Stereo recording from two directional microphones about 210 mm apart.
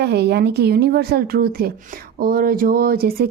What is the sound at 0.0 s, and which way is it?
A woman's voice, 50° right (ahead or behind).